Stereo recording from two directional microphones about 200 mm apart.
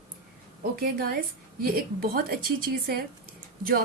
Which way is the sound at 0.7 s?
50° right (ahead or behind).